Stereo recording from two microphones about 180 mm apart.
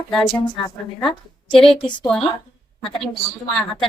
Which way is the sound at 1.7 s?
25° left (ahead or behind).